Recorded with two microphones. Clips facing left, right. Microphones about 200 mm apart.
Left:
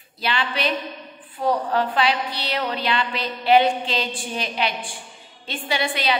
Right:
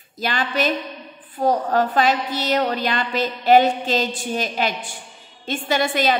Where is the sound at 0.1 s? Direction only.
45° right (ahead or behind).